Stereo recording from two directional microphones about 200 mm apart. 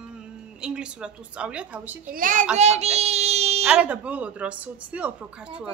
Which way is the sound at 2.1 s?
40° right (ahead or behind).